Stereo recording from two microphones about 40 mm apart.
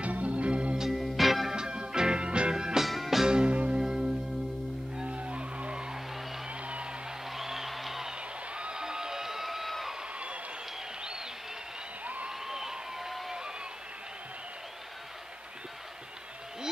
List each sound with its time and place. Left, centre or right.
0.0 s music: right
0.7 s music: centre
1.5 s music: right
2.5 s music: centre
3.3 s music: right
3.7 s music: centre
4.9 s skidding: right
6.4 s music: right
7.2 s music: centre
8.1 s crowd: right; by 9.9 s centre
10.1 s a sound: right
11.0 s applause: right
12.0 s a sound: right
12.3 s crowd: centre